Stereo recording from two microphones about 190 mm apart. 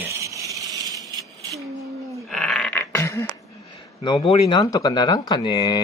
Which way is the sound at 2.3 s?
Centre (ahead or behind).